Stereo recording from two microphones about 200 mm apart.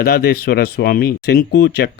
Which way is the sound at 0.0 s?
50° left (ahead or behind).